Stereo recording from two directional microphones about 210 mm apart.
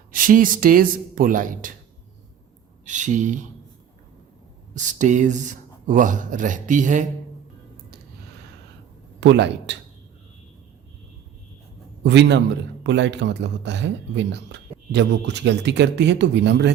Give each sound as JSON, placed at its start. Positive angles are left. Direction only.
{"t": 0.1, "sound": "speech", "side_deg": -40}
{"t": 2.8, "sound": "speech", "side_deg": -35}
{"t": 4.7, "sound": "speech", "side_deg": -35}
{"t": 9.2, "sound": "speech", "side_deg": -55}
{"t": 12.0, "sound": "speech", "side_deg": -55}